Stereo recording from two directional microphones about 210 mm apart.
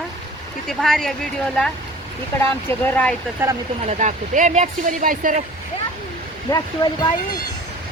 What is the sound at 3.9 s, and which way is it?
Speech, 35° right (ahead or behind).